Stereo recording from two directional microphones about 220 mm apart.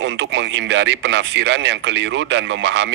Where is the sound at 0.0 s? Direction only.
55° right (ahead or behind).